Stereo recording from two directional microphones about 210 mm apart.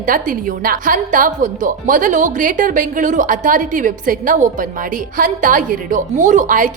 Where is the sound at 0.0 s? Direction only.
40° right (ahead or behind).